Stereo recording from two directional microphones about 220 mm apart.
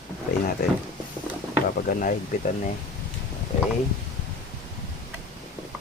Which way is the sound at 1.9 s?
40° left (ahead or behind).